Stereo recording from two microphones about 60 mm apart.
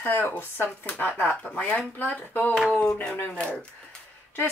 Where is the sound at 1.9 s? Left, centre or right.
Left.